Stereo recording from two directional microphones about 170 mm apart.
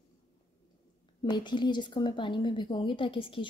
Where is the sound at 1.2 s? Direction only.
25° left (ahead or behind).